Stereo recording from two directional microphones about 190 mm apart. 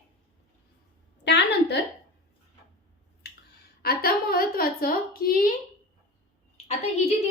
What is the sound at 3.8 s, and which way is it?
A woman's voice, 55° left (ahead or behind).